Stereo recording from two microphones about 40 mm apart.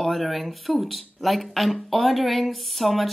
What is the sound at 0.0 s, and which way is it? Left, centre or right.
Speech, centre.